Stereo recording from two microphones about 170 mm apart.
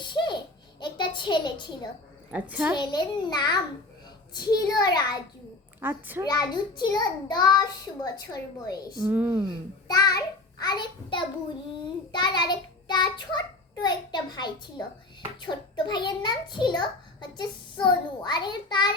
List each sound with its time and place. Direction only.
0.0 s baby laughter: 25° left (ahead or behind)
0.8 s a sound: 25° left (ahead or behind)
2.3 s a child's voice: 10° right (ahead or behind)
2.7 s a child's voice: 25° left (ahead or behind)
5.8 s a child's voice: 10° right (ahead or behind)
6.2 s a child's voice: 25° left (ahead or behind)
9.0 s a child's voice: 10° right (ahead or behind)
9.8 s child singing: 20° left (ahead or behind)
10.6 s a child's voice: 25° left (ahead or behind)